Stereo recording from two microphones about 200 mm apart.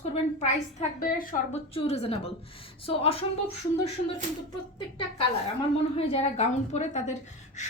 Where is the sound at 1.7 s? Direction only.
30° left (ahead or behind).